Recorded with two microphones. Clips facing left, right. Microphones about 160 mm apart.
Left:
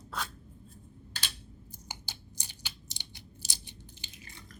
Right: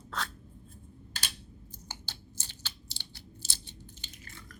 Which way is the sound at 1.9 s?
15° left (ahead or behind).